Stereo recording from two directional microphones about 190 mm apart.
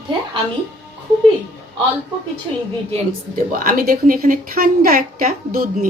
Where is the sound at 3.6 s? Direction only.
45° right (ahead or behind).